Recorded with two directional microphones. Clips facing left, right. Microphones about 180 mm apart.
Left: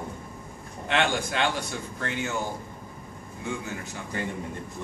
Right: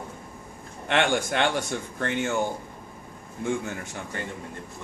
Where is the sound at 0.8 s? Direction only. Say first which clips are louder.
Right 2 dB; 55° right (ahead or behind).